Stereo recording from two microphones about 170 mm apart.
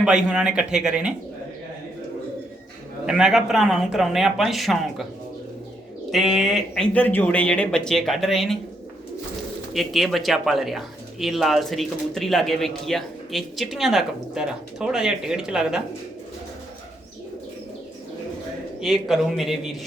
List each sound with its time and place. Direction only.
0.0 s speech: 5° right (ahead or behind)
3.1 s speech: 5° right (ahead or behind)
6.1 s speech: centre (ahead or behind)
6.9 s speech: 10° left (ahead or behind)
9.7 s speech: centre (ahead or behind)
18.8 s speech: centre (ahead or behind)